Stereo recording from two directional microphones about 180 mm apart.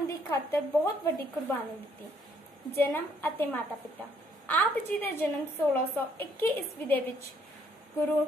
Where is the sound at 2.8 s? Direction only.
10° left (ahead or behind).